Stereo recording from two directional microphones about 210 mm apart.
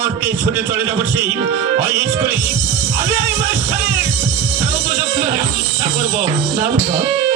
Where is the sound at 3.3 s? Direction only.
10° right (ahead or behind).